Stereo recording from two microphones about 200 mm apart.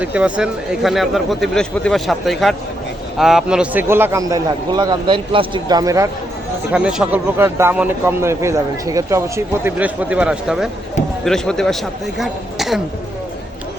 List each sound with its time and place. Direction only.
0.0 s speech: 5° right (ahead or behind)
6.7 s speech: 5° right (ahead or behind)